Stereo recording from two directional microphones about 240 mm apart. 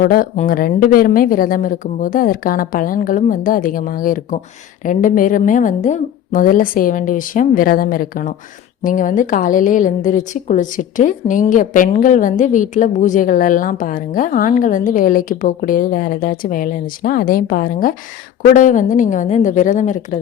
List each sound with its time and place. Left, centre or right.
0.0 s a woman's voice: left